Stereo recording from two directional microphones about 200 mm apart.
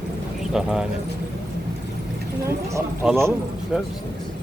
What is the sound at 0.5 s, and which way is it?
Speech, centre (ahead or behind).